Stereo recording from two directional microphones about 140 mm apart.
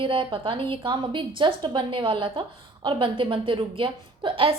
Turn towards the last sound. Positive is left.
turn(degrees=-35)  # may be behind; listen again after turning